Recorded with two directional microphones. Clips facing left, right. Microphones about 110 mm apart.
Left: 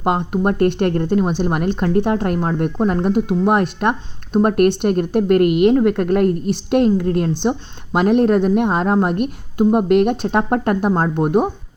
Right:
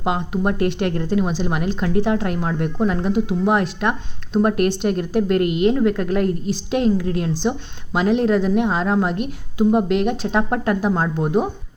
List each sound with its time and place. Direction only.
0.0 s a woman's voice: 50° left (ahead or behind)